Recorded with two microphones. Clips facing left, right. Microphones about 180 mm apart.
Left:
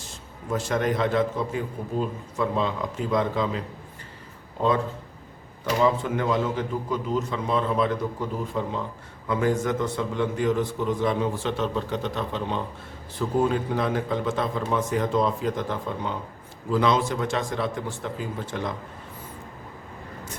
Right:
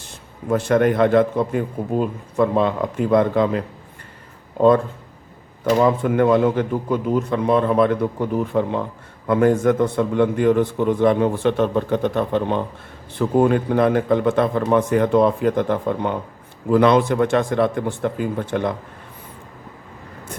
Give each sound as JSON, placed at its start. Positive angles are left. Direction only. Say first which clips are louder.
{"t": 0.5, "sound": "a man's voice", "louder": "right 8 dB", "side_deg": -60}
{"t": 5.8, "sound": "a man's voice", "louder": "right 5 dB", "side_deg": -55}